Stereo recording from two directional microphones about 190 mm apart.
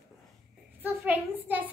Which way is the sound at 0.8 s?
10° right (ahead or behind).